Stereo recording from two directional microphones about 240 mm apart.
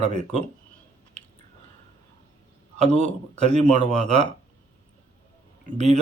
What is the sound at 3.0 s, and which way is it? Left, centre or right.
Speech, right.